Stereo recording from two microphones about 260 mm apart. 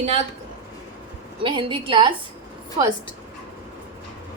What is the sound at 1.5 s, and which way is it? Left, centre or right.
Speech, centre.